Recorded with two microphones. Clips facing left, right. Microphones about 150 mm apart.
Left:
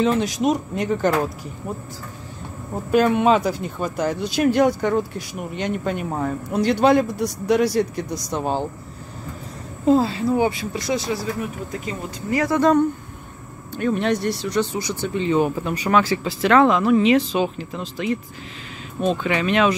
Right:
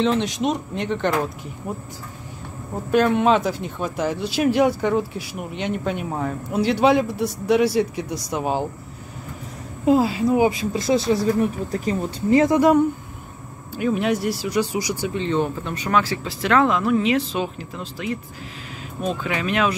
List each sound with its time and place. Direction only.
0.0 s speech: 5° left (ahead or behind)
2.9 s speech: centre (ahead or behind)
9.8 s speech: 10° right (ahead or behind); by 11.0 s 25° right (ahead or behind)
11.7 s speech: 35° right (ahead or behind)
12.5 s speech: 10° right (ahead or behind)
15.1 s speech: 5° left (ahead or behind)
19.2 s speech: 5° right (ahead or behind)